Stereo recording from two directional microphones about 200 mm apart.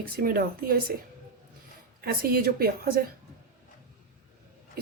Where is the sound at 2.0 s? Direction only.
50° right (ahead or behind).